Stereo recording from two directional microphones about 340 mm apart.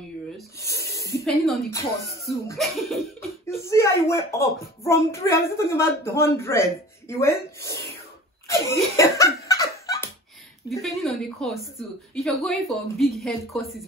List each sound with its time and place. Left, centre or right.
0.7 s a sound: left
1.0 s a woman's voice: centre
8.5 s laughter: centre
10.7 s a woman's voice: centre